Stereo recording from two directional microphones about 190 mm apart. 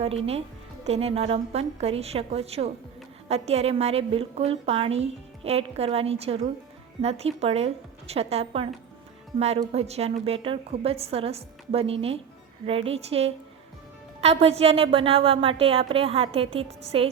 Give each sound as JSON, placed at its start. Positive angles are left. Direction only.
{"t": 0.0, "sound": "a woman's voice", "side_deg": -30}